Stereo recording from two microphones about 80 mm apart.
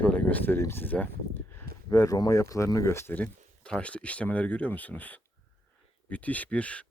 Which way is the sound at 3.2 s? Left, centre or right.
Centre.